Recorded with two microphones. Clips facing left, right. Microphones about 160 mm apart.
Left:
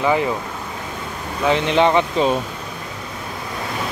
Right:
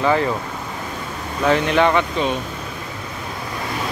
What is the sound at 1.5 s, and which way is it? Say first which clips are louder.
Speech: left 1 dB; 25° left (ahead or behind).